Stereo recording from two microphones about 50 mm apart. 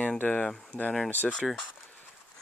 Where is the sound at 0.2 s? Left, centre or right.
Left.